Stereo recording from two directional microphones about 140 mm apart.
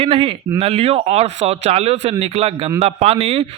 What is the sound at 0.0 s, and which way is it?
Speech, 40° right (ahead or behind).